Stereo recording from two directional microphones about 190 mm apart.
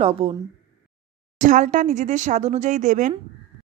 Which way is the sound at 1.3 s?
40° right (ahead or behind).